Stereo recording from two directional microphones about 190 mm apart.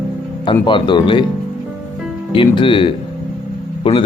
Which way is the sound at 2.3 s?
25° left (ahead or behind).